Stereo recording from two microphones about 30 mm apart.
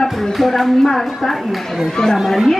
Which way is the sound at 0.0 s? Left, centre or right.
Centre.